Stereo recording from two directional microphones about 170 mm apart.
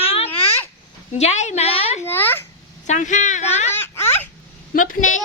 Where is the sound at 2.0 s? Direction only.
15° left (ahead or behind).